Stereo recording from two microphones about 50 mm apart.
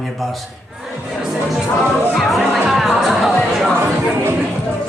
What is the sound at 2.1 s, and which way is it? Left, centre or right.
Speech, centre.